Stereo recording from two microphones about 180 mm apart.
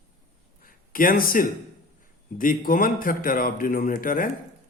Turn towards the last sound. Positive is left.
turn(degrees=50)  # may be behind; listen again after turning